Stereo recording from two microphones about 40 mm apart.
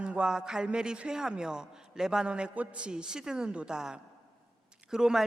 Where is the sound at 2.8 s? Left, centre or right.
Right.